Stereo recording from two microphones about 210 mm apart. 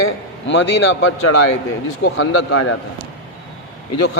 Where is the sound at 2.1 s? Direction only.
80° left.